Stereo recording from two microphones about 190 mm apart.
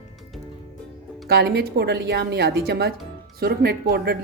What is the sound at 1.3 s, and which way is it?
A woman's voice, 55° right (ahead or behind).